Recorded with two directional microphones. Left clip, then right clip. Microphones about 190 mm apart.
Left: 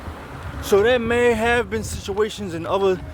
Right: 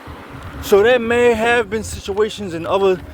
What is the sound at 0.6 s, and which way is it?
Speech, 20° right (ahead or behind).